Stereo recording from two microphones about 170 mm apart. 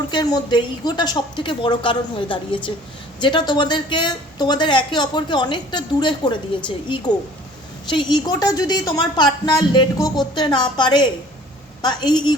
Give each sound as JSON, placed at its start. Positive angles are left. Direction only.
{"t": 0.1, "sound": "a woman's voice", "side_deg": 25}